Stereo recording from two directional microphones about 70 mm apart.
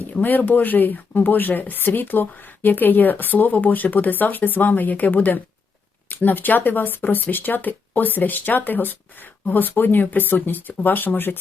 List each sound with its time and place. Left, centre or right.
0.0 s speech: left